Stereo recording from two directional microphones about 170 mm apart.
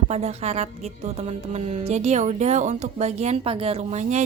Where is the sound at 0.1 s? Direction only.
40° right (ahead or behind).